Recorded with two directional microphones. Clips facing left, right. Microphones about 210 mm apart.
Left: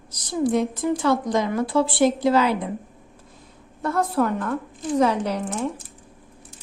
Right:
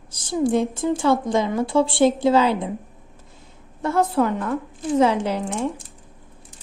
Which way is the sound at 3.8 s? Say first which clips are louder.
Right 3 dB; 25° right (ahead or behind).